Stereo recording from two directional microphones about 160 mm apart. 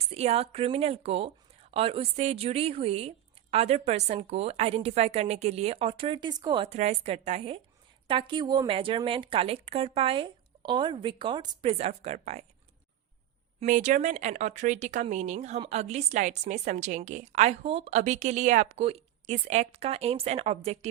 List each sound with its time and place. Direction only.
0.1 s speech: 40° right (ahead or behind)
6.7 s a woman's voice: 45° right (ahead or behind)
13.7 s a woman's voice: 55° right (ahead or behind); by 20.7 s 40° right (ahead or behind)